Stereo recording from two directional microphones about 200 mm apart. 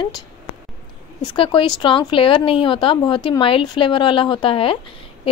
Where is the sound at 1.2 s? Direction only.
25° left (ahead or behind).